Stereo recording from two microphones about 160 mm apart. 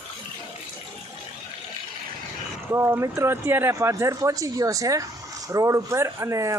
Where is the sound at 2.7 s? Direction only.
15° right (ahead or behind).